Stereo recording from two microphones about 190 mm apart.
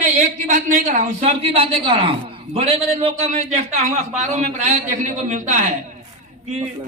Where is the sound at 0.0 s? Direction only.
40° right (ahead or behind).